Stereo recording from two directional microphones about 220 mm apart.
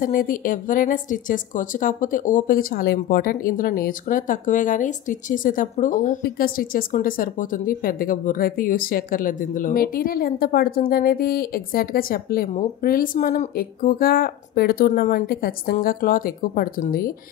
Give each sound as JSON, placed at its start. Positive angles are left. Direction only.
{"t": 0.0, "sound": "speech", "side_deg": 40}